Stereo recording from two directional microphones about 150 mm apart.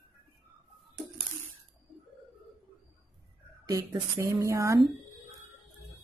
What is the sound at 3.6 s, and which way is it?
Speech, 20° right (ahead or behind).